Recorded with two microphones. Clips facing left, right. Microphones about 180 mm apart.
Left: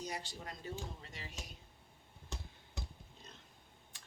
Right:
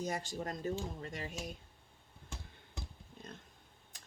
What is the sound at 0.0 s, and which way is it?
Speech, 45° right (ahead or behind).